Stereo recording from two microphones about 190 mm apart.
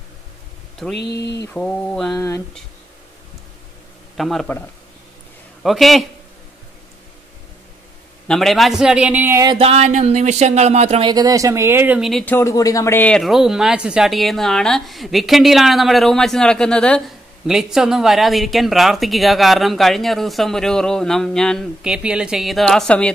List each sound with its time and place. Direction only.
0.9 s speech: 60° left (ahead or behind)
1.5 s speech: 5° left (ahead or behind)
2.1 s speech: 15° left (ahead or behind)
4.2 s speech: centre (ahead or behind)
5.6 s speech: centre (ahead or behind)
8.3 s speech: centre (ahead or behind); by 9.6 s 15° right (ahead or behind)
9.6 s speech: 35° right (ahead or behind); by 23.1 s 5° left (ahead or behind)